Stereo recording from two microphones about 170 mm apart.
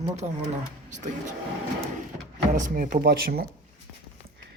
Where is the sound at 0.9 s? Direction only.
45° right (ahead or behind).